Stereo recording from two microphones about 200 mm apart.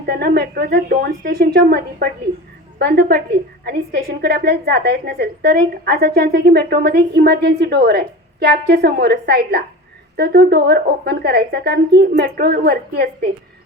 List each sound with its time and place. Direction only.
0.0 s a woman's voice: 50° right (ahead or behind)